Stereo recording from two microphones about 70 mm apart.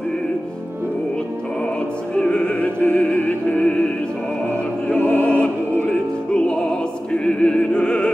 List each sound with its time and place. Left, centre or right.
2.1 s music: centre
4.8 s music: centre
7.2 s opera: centre